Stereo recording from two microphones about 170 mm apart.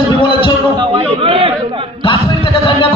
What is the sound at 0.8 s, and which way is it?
A man's voice, 30° right (ahead or behind).